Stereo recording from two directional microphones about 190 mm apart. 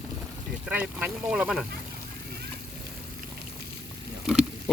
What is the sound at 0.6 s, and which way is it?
Speech, 5° right (ahead or behind).